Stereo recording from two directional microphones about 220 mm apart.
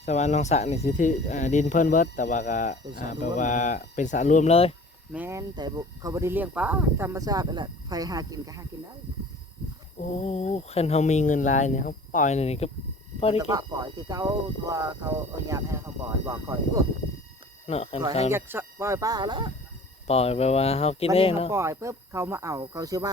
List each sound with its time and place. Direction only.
0.0 s speech: 30° left (ahead or behind)
5.1 s speech: 10° right (ahead or behind)
10.0 s speech: 30° left (ahead or behind)
13.5 s speech: 20° right (ahead or behind)
17.7 s speech: 30° left (ahead or behind)
18.3 s speech: 10° right (ahead or behind)
20.1 s speech: 30° left (ahead or behind)
21.5 s speech: 10° right (ahead or behind)